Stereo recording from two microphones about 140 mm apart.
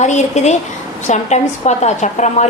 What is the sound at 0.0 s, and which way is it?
A woman's voice, 55° left (ahead or behind).